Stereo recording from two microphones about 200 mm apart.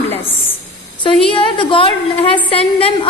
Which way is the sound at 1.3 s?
25° left (ahead or behind).